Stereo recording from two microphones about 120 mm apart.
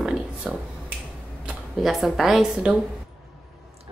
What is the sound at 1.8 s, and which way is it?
Speech, centre (ahead or behind).